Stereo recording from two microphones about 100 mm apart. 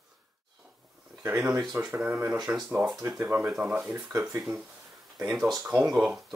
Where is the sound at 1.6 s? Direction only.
15° right (ahead or behind).